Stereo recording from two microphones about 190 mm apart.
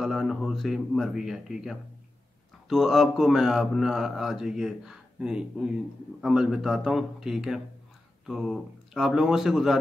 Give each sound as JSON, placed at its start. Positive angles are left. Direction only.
{"t": 0.0, "sound": "speech", "side_deg": 0}